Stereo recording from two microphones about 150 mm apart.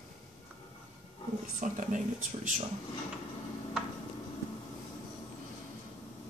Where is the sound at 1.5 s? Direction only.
55° right (ahead or behind).